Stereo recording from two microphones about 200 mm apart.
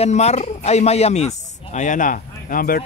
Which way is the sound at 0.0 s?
35° left (ahead or behind).